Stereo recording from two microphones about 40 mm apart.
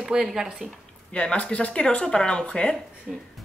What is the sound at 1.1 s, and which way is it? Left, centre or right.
Speech, left.